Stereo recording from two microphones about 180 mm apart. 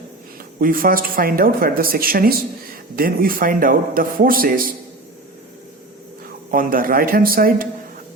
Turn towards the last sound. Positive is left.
turn(degrees=-55)  # may be behind; listen again after turning